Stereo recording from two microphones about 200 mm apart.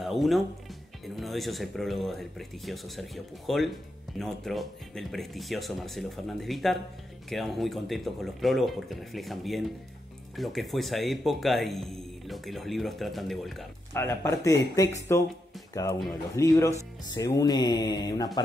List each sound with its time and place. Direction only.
0.0 s music: centre (ahead or behind)
1.0 s speech: centre (ahead or behind)
13.9 s speech: 15° left (ahead or behind)